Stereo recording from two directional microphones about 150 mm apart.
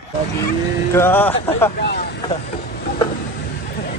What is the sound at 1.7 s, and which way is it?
Speech, 90° left.